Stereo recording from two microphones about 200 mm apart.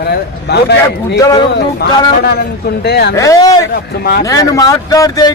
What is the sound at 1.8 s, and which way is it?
A man's voice, 55° left (ahead or behind).